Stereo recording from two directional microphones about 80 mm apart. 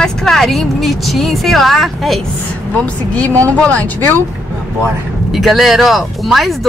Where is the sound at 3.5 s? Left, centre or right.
Centre.